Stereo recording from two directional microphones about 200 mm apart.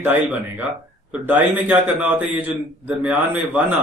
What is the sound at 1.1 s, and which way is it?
A man's voice, 10° right (ahead or behind).